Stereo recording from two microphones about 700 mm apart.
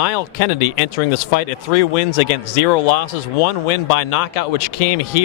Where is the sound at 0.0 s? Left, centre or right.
Left.